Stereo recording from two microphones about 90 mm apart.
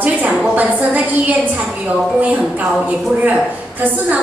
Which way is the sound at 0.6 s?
20° right (ahead or behind).